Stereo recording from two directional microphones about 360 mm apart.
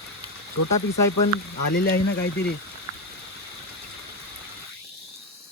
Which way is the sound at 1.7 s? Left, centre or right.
Left.